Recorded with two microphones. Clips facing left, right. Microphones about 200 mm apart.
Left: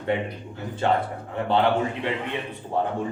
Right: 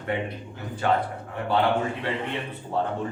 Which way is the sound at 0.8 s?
25° left (ahead or behind).